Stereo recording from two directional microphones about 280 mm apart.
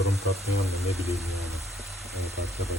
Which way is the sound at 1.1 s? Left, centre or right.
Centre.